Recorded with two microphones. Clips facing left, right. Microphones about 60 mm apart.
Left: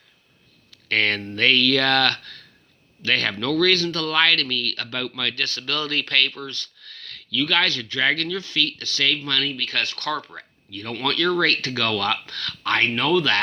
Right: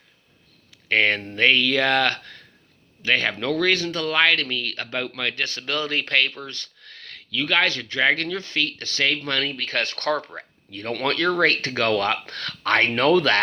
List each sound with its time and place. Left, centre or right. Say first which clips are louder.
0.7 s speech: right 2 dB; centre; by 13.4 s right